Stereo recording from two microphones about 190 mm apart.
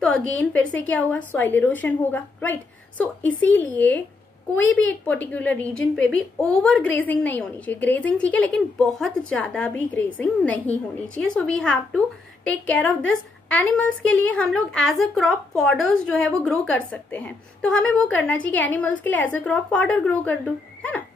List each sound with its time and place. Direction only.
0.4 s a woman's voice: 5° left (ahead or behind)
4.6 s a woman's voice: 85° left
5.0 s a woman's voice: 10° left (ahead or behind)